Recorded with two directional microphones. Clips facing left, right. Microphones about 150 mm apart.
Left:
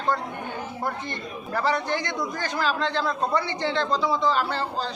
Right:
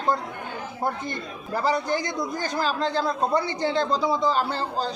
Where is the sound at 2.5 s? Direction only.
40° right (ahead or behind).